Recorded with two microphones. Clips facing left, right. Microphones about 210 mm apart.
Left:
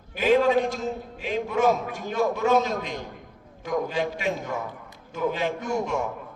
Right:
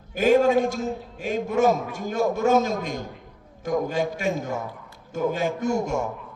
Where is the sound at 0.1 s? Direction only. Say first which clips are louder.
Right 2 dB; 45° right (ahead or behind).